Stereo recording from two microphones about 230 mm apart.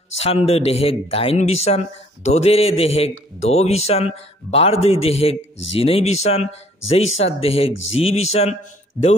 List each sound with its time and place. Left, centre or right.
0.2 s speech: left
7.7 s speech: left
8.0 s speech: left